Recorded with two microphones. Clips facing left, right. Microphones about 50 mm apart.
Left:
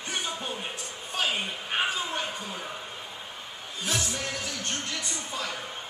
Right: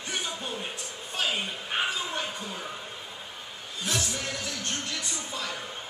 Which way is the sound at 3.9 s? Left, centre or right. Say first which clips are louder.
Even; centre.